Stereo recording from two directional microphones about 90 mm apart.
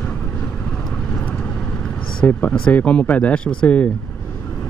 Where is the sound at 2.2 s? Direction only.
20° left (ahead or behind).